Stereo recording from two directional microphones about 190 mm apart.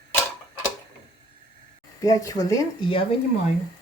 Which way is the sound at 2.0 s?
20° left (ahead or behind).